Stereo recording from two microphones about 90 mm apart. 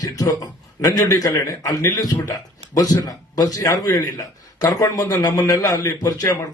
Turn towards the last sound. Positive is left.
turn(degrees=35)  # may be behind; listen again after turning